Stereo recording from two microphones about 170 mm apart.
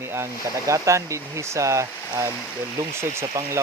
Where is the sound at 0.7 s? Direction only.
15° right (ahead or behind).